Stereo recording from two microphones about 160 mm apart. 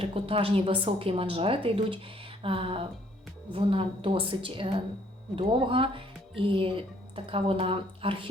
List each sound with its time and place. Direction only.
0.0 s a woman's voice: 35° right (ahead or behind)